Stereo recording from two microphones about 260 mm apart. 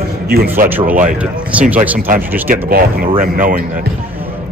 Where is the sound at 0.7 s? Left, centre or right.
Centre.